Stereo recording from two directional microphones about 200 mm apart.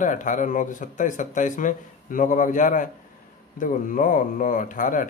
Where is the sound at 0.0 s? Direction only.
40° left (ahead or behind).